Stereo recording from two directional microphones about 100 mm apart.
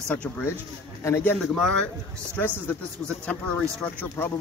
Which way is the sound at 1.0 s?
25° left (ahead or behind).